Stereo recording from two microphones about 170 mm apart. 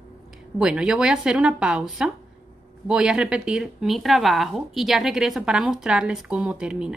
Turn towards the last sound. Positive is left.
turn(degrees=-5)  # may be behind; listen again after turning